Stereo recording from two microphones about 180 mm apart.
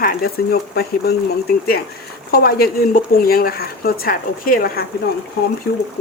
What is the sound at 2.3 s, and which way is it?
Speech, 60° left (ahead or behind).